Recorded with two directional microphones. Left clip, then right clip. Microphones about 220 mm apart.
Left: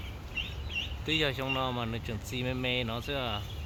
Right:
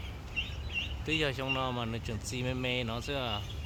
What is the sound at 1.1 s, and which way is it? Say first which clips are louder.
Speech: left 2 dB; centre (ahead or behind).